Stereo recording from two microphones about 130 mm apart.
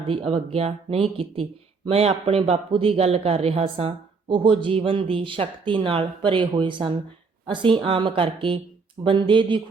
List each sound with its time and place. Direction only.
0.1 s speech: 45° right (ahead or behind)